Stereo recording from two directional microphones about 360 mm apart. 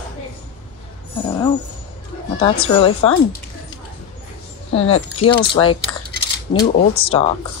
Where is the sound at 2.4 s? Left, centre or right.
Centre.